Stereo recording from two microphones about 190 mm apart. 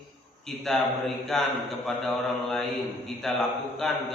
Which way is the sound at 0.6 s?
Centre (ahead or behind).